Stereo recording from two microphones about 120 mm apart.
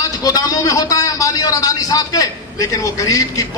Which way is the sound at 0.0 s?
30° left (ahead or behind).